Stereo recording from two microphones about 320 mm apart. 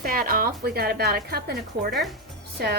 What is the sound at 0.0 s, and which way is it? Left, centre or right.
A woman's voice, right.